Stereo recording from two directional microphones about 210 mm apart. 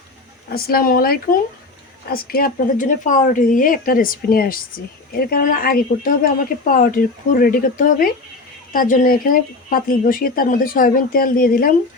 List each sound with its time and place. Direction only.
0.5 s speech: 45° left (ahead or behind)